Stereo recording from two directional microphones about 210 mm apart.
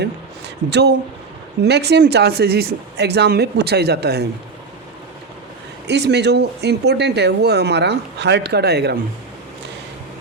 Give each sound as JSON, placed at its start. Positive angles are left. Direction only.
{"t": 0.0, "sound": "a sound", "side_deg": -55}
{"t": 1.6, "sound": "speech", "side_deg": -55}
{"t": 5.9, "sound": "speech", "side_deg": -55}